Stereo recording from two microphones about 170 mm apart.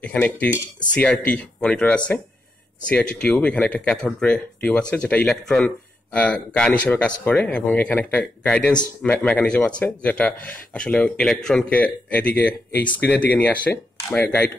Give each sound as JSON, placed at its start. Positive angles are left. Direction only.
{"t": 0.0, "sound": "speech", "side_deg": 10}